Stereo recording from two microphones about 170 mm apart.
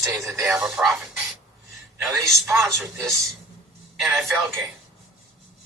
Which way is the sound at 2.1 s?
20° right (ahead or behind).